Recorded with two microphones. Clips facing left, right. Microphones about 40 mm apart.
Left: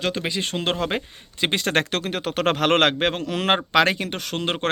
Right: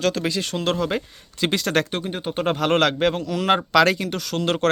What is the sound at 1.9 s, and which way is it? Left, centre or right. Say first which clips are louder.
A man's voice: left 1 dB; left.